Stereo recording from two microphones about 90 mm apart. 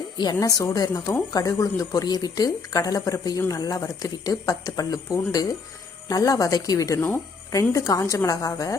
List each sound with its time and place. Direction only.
0.2 s speech: 50° left (ahead or behind)
0.4 s speech: 40° left (ahead or behind)